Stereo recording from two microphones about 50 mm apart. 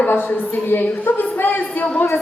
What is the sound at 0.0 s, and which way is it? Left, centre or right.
A woman's voice, left.